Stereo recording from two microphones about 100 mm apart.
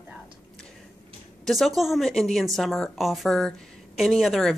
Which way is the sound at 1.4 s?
Centre (ahead or behind).